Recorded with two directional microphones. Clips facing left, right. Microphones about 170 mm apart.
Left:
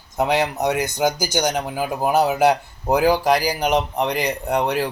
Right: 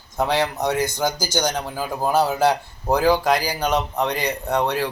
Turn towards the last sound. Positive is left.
turn(degrees=15)  # may be behind; listen again after turning